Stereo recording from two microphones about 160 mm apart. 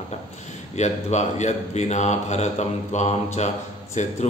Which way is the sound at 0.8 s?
45° left (ahead or behind).